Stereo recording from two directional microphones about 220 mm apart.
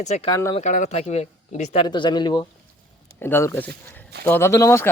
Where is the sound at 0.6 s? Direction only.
35° left (ahead or behind).